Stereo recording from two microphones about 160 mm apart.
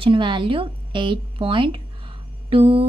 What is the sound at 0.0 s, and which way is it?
Mantra, 30° right (ahead or behind).